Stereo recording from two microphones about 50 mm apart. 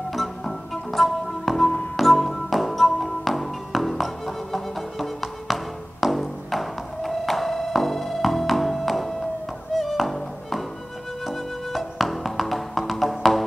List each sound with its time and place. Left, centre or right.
0.4 s music: centre